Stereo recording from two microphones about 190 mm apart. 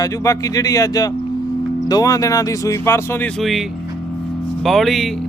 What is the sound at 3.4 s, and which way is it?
Speech, centre (ahead or behind).